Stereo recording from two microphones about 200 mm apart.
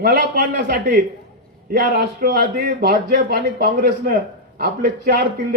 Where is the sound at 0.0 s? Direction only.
45° right (ahead or behind).